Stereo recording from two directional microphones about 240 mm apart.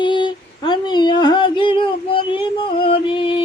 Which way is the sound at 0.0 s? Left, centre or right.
Centre.